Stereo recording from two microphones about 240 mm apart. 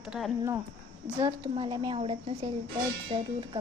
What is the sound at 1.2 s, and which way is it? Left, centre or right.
A woman's voice, centre.